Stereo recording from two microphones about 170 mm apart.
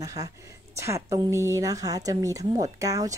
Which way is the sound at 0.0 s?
20° right (ahead or behind).